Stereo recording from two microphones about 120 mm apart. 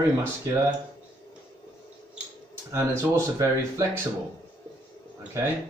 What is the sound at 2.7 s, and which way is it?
Speech, 25° right (ahead or behind).